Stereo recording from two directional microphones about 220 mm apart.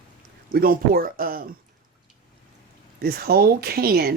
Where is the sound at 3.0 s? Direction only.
45° right (ahead or behind).